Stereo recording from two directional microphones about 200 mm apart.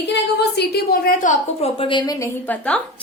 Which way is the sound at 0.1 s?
55° left (ahead or behind).